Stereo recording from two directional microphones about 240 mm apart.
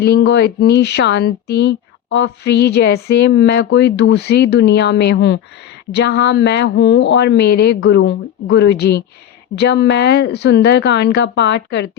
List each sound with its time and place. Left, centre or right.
0.0 s speech: left